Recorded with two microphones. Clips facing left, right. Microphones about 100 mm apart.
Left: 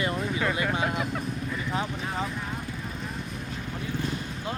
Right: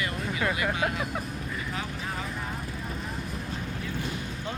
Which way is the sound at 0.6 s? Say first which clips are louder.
Left 1 dB; 30° left (ahead or behind).